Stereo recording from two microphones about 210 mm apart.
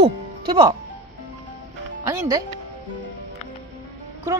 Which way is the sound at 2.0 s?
15° right (ahead or behind).